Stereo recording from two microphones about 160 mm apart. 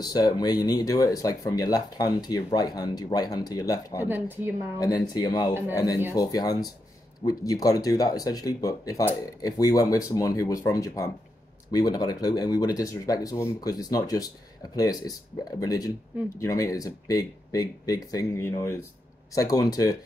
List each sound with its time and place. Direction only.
0.0 s speech: 25° left (ahead or behind)
4.0 s speech: 10° right (ahead or behind)
4.7 s speech: 20° left (ahead or behind)